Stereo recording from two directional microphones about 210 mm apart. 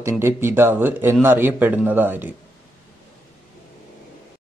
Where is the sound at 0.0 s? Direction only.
10° right (ahead or behind).